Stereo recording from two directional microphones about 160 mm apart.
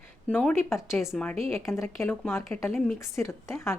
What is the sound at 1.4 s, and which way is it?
Speech, 15° left (ahead or behind).